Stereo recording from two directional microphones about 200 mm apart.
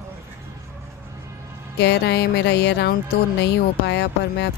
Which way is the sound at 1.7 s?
55° left (ahead or behind).